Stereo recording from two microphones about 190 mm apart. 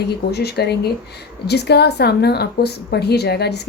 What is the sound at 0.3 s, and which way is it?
A woman's voice, 60° left (ahead or behind).